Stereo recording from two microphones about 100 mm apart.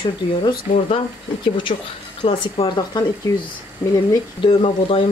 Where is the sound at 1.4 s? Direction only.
55° left (ahead or behind).